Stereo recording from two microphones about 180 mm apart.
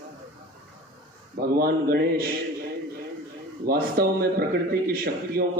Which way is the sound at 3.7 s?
60° right (ahead or behind).